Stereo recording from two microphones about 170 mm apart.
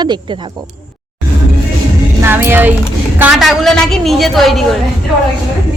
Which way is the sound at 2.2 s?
15° right (ahead or behind).